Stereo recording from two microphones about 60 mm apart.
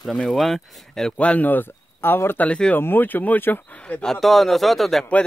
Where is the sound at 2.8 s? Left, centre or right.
Left.